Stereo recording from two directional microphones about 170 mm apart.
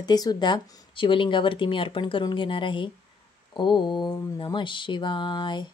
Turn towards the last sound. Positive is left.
turn(degrees=25)  # may be behind; listen again after turning